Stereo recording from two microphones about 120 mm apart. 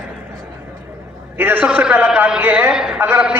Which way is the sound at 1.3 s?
15° right (ahead or behind).